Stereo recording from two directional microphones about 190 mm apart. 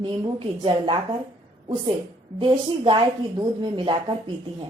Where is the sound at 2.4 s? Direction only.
25° right (ahead or behind).